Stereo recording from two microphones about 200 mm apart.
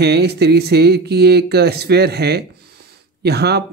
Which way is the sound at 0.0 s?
55° right (ahead or behind).